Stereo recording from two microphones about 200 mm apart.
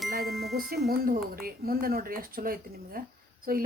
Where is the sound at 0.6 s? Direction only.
50° right (ahead or behind).